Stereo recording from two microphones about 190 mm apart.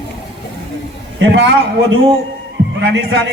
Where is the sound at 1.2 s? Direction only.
75° right (ahead or behind).